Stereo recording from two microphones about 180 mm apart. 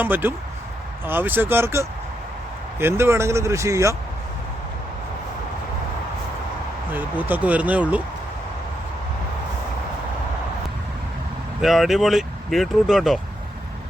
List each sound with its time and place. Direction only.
0.0 s speech: 10° right (ahead or behind)
6.9 s speech: 10° right (ahead or behind)
11.6 s speech: centre (ahead or behind)